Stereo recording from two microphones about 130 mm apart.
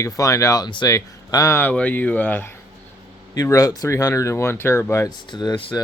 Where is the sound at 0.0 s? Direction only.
25° left (ahead or behind).